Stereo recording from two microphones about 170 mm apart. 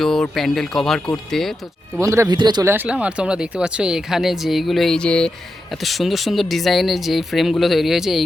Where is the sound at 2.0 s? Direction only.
20° right (ahead or behind).